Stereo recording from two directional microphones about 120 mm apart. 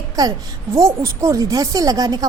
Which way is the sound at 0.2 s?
30° right (ahead or behind).